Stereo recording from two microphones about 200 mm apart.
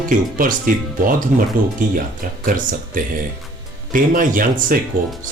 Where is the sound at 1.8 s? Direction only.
40° right (ahead or behind).